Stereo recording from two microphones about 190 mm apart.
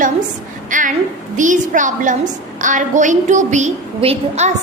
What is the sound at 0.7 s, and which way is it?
A woman's voice, 45° right (ahead or behind).